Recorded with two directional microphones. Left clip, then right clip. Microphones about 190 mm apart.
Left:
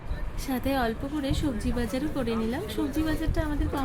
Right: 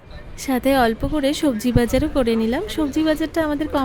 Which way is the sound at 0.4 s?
45° right (ahead or behind).